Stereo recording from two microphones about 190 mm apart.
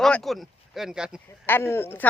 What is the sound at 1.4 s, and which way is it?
Speech, 10° left (ahead or behind).